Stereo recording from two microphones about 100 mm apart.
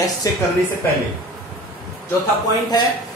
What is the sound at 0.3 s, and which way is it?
Speech, 35° left (ahead or behind).